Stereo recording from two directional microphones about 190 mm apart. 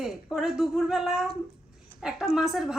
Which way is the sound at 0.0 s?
Centre (ahead or behind).